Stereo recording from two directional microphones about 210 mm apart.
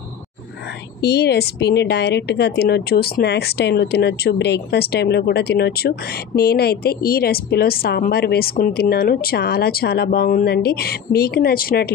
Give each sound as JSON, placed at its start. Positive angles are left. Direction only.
{"t": 1.0, "sound": "a woman's voice", "side_deg": 50}